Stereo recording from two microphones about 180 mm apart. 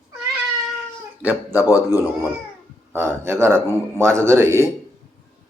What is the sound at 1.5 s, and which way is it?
Speech, 20° left (ahead or behind).